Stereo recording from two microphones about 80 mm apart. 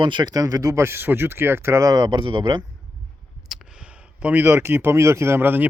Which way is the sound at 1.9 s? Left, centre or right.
Right.